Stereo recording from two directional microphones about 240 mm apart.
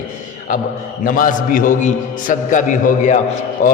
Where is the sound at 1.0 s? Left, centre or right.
Left.